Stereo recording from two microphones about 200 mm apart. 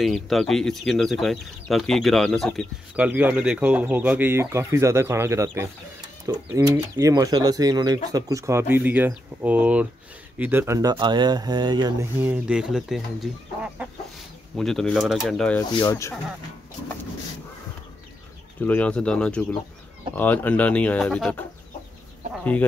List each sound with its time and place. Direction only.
0.0 s speech: centre (ahead or behind); by 12.1 s 20° right (ahead or behind)
12.2 s speech: 5° right (ahead or behind)
14.6 s speech: centre (ahead or behind)
15.8 s speech: 15° left (ahead or behind)
18.6 s speech: 10° left (ahead or behind)